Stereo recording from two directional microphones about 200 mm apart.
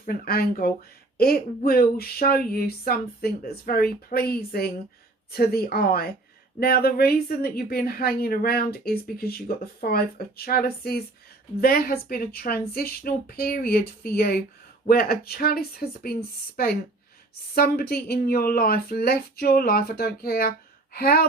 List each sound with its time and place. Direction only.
0.0 s speech: 50° left (ahead or behind)
17.5 s speech: 50° left (ahead or behind)